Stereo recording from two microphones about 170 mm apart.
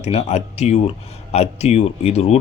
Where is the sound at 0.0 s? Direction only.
40° left (ahead or behind).